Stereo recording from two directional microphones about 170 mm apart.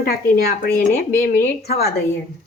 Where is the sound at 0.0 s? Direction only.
60° left (ahead or behind).